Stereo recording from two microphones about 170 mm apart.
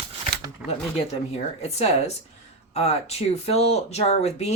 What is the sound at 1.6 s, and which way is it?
Speech, 40° left (ahead or behind).